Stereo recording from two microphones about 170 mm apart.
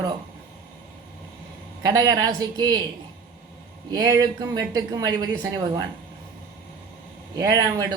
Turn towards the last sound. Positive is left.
turn(degrees=-20)  # may be behind; listen again after turning